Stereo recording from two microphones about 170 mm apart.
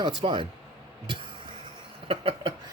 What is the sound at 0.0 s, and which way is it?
Speech, 30° right (ahead or behind).